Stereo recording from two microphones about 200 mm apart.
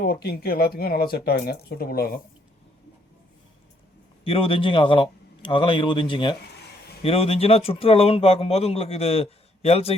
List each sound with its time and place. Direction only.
0.0 s speech: 50° left (ahead or behind)
4.2 s a man's voice: 25° left (ahead or behind)